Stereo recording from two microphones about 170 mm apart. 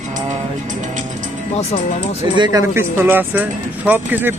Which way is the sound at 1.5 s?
40° left (ahead or behind).